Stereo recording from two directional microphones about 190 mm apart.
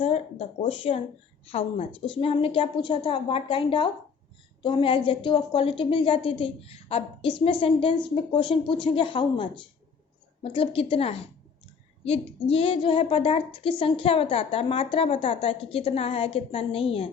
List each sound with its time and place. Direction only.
0.0 s a woman's voice: 30° left (ahead or behind)